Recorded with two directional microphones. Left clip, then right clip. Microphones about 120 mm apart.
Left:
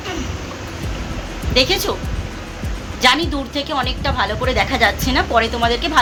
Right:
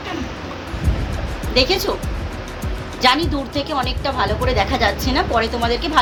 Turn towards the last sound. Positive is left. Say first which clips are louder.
# left 2 dB
turn(degrees=10)  # may be behind; listen again after turning